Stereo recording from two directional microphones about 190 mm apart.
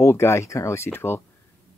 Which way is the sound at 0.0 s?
15° left (ahead or behind).